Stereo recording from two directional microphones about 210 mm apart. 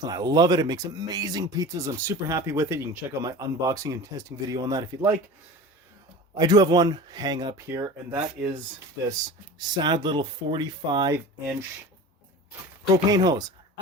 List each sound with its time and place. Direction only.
0.0 s speech: 20° right (ahead or behind)
6.3 s speech: 20° right (ahead or behind)
9.6 s speech: 20° right (ahead or behind)
13.1 s speech: 20° right (ahead or behind)